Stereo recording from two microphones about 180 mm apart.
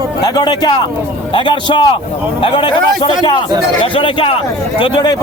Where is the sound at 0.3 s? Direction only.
25° left (ahead or behind).